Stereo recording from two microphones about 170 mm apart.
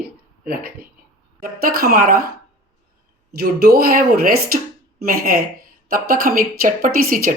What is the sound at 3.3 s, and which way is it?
Speech, 60° right (ahead or behind).